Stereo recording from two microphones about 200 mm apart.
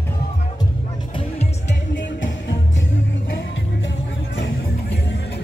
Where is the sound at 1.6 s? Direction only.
65° left (ahead or behind).